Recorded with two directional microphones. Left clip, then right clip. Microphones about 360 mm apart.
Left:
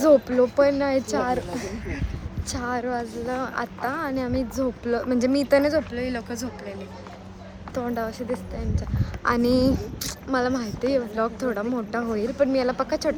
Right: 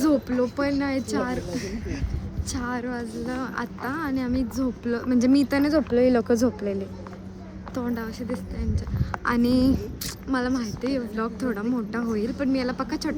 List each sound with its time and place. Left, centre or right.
0.0 s a woman's voice: centre
5.9 s speech: right
7.8 s a woman's voice: centre